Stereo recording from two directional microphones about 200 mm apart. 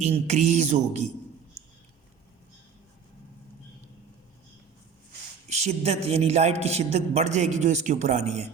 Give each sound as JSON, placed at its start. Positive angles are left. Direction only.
{"t": 0.0, "sound": "a man's voice", "side_deg": -35}
{"t": 5.5, "sound": "a man's voice", "side_deg": -35}